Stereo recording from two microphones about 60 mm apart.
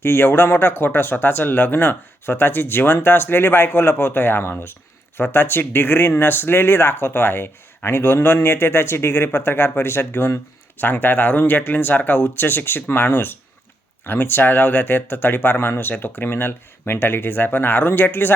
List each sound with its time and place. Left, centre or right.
0.0 s speech: left